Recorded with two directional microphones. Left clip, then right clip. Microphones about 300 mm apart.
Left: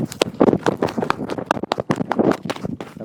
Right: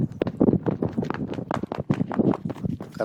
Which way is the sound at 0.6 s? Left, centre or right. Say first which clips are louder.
Left 8 dB; centre.